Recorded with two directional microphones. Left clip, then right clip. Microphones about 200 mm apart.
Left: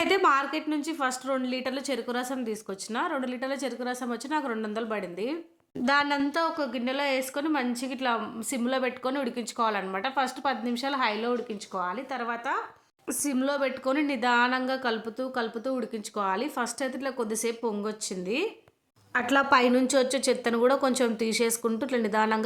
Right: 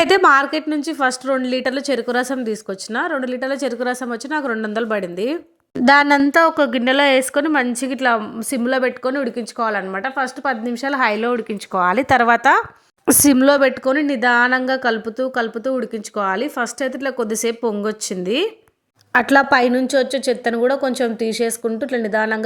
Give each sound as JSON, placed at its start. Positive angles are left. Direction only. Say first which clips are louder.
{"t": 0.0, "sound": "a woman's voice", "louder": "right 11 dB", "side_deg": -35}
{"t": 13.9, "sound": "a woman's voice", "louder": "right 9 dB", "side_deg": -25}